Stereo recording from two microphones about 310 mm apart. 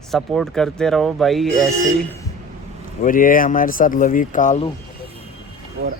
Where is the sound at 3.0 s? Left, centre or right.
Left.